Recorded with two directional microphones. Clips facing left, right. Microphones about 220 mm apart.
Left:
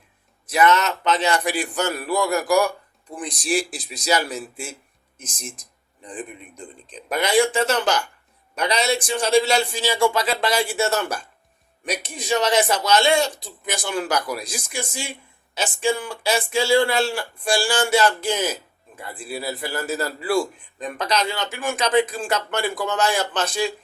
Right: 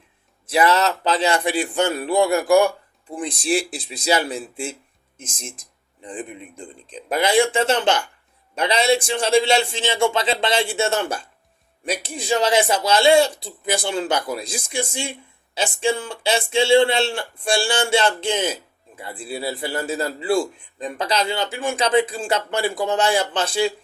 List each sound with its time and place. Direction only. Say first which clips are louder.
0.5 s a man's voice: right 1 dB; 30° right (ahead or behind)